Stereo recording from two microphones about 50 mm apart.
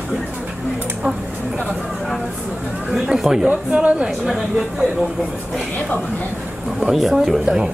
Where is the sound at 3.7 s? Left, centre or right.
Right.